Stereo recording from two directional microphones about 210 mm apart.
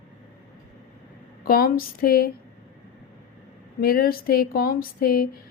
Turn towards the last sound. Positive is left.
turn(degrees=45)  # may be behind; listen again after turning